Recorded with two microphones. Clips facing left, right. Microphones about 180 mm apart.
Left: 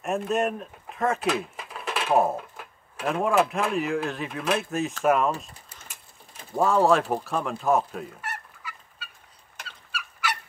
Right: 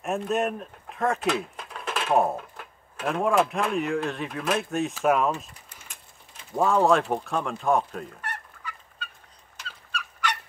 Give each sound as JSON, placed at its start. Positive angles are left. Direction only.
{"t": 0.0, "sound": "speech", "side_deg": 0}
{"t": 6.5, "sound": "speech", "side_deg": 0}
{"t": 9.6, "sound": "fowl", "side_deg": 55}
{"t": 10.2, "sound": "fowl", "side_deg": 5}